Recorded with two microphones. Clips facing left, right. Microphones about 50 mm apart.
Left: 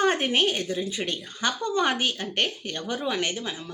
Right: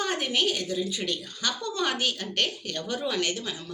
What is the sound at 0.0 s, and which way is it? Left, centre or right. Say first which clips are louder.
A woman's voice: left 4 dB; left.